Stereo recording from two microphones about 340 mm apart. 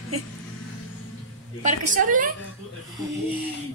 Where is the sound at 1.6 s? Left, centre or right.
Right.